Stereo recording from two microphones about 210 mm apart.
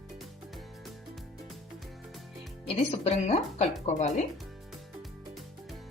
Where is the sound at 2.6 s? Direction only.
30° left (ahead or behind).